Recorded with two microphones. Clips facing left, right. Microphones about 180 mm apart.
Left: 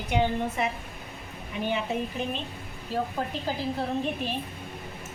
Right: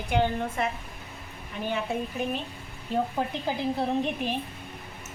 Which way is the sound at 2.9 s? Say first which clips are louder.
Right 2 dB; 20° right (ahead or behind).